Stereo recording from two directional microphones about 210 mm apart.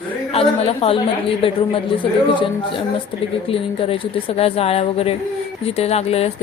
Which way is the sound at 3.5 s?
25° left (ahead or behind).